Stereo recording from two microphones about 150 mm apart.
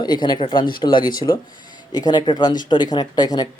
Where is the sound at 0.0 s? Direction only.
30° left (ahead or behind).